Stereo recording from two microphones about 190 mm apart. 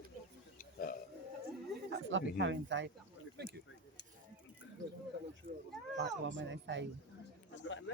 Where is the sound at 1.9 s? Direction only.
75° right (ahead or behind).